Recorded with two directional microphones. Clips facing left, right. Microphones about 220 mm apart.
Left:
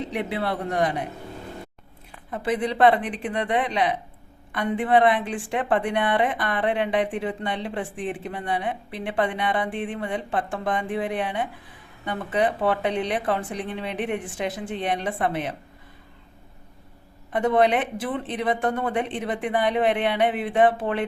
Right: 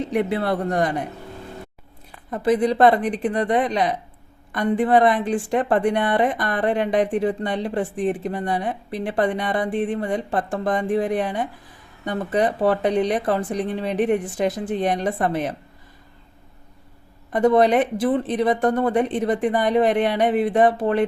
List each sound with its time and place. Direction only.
0.1 s speech: 45° right (ahead or behind)
2.3 s a woman's voice: 40° right (ahead or behind)
17.3 s a woman's voice: 40° right (ahead or behind)